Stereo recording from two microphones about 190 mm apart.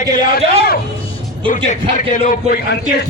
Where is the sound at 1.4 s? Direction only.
25° right (ahead or behind).